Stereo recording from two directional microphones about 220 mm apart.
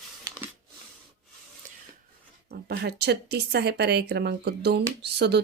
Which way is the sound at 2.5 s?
50° right (ahead or behind).